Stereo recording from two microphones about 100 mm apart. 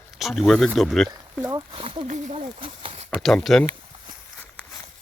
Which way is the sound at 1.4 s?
60° right (ahead or behind).